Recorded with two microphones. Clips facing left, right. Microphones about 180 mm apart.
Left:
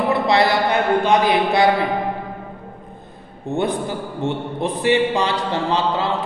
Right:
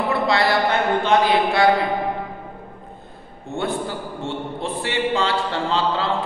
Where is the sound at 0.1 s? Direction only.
20° left (ahead or behind).